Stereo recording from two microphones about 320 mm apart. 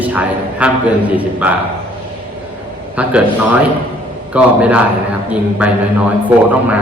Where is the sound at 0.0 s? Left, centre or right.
Centre.